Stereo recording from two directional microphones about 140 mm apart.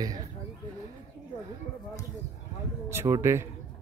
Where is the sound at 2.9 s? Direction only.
20° right (ahead or behind).